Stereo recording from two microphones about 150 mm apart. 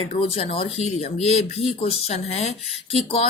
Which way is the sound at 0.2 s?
40° left (ahead or behind).